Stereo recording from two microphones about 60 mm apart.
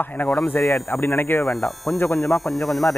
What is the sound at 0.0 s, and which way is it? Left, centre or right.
Speech, left.